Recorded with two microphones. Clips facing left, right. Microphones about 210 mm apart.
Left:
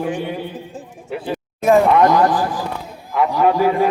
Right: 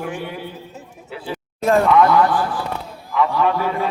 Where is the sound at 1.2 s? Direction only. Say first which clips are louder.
Left 3 dB; 15° left (ahead or behind).